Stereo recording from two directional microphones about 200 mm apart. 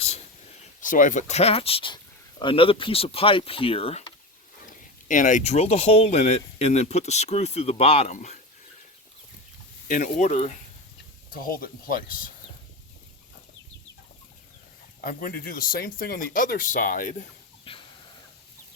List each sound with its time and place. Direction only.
0.8 s speech: 40° left (ahead or behind)
5.0 s speech: 40° left (ahead or behind)
9.9 s speech: 40° left (ahead or behind)
11.3 s speech: 45° left (ahead or behind)
15.0 s speech: 45° left (ahead or behind)
17.7 s a sound: 30° left (ahead or behind)